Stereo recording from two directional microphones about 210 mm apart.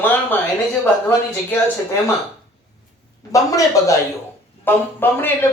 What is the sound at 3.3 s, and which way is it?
A man's voice, 15° left (ahead or behind).